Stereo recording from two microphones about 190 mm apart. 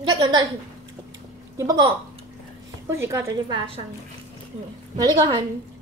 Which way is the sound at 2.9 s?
15° right (ahead or behind).